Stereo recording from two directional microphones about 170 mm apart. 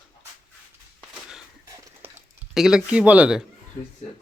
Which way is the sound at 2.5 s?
Centre (ahead or behind).